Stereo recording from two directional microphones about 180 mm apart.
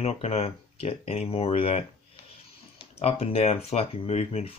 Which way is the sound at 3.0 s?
35° left (ahead or behind).